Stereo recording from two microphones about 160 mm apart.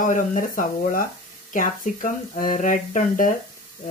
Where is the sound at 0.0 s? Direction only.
55° left (ahead or behind).